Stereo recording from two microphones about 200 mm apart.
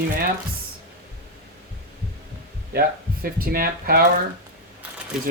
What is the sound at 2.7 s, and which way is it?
Speech, 50° right (ahead or behind).